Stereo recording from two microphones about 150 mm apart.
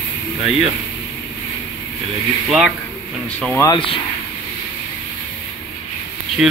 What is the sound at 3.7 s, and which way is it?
Speech, 35° left (ahead or behind).